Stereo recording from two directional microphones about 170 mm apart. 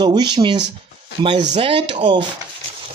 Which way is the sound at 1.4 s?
35° right (ahead or behind).